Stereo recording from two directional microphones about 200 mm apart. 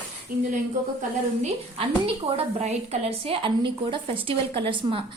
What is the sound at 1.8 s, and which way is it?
A woman's voice, 30° right (ahead or behind).